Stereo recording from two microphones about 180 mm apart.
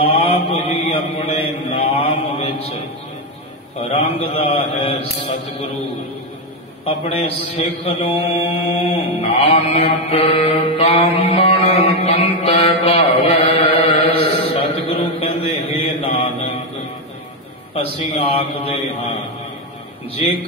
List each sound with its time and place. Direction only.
0.0 s mantra: 30° left (ahead or behind)
4.2 s mantra: 30° left (ahead or behind)
6.8 s mantra: 30° left (ahead or behind)
17.9 s mantra: 30° left (ahead or behind)
20.2 s mantra: 35° left (ahead or behind)